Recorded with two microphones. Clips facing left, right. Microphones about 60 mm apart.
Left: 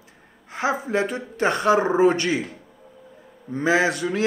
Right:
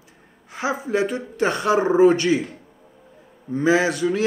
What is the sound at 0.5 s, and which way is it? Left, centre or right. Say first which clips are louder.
Speech: even; left.